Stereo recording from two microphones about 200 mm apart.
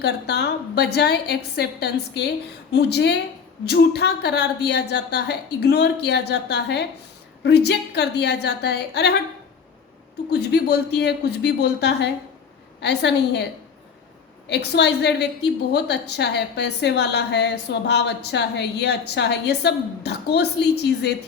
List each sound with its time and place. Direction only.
0.0 s a woman's voice: 55° left (ahead or behind)
10.2 s a woman's voice: 55° left (ahead or behind)